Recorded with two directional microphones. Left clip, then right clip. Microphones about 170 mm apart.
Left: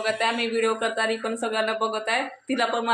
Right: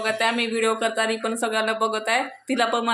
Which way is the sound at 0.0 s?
30° right (ahead or behind).